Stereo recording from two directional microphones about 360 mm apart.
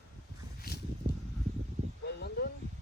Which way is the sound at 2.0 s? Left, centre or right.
Left.